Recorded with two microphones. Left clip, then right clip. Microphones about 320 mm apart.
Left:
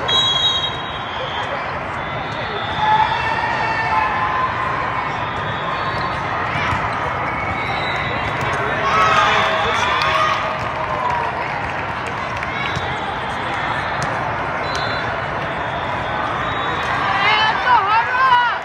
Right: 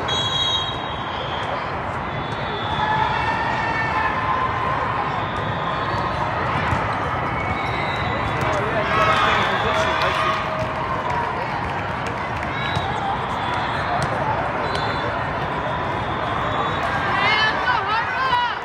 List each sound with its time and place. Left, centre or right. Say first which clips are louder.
17.2 s run: left 3 dB; centre